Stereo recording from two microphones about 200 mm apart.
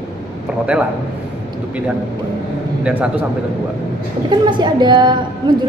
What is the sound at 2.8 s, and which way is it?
Speech, 5° right (ahead or behind).